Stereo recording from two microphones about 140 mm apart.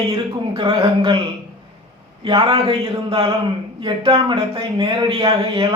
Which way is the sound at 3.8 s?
35° right (ahead or behind).